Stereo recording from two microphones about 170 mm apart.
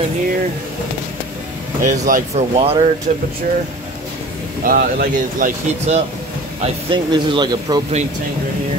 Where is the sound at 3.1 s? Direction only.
45° right (ahead or behind).